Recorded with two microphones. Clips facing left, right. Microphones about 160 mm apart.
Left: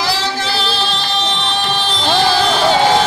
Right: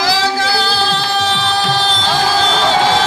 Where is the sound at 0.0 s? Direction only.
90° right.